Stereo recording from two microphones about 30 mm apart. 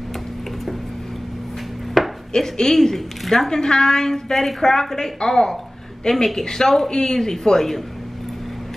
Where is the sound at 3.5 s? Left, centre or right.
Left.